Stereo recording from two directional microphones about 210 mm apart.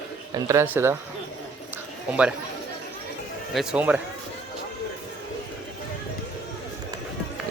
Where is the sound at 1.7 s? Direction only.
5° right (ahead or behind).